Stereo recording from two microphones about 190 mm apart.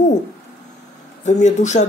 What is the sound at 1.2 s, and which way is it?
Speech, 40° left (ahead or behind).